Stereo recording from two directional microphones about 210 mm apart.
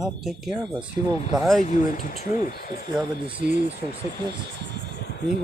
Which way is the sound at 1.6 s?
40° left (ahead or behind).